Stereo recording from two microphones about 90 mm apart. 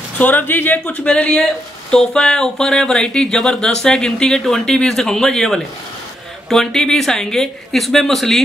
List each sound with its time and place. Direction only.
0.2 s speech: 20° left (ahead or behind)
1.0 s speech: 10° left (ahead or behind)